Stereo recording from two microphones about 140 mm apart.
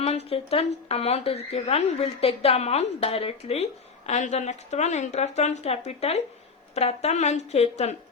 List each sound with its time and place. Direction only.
0.0 s speech: 45° left (ahead or behind)